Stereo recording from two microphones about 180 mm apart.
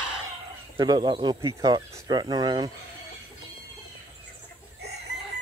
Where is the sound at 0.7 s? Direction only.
25° right (ahead or behind).